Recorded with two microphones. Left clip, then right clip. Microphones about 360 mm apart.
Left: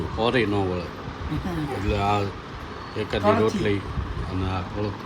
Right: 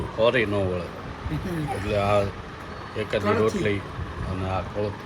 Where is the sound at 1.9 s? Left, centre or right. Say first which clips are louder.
Right 2 dB; centre.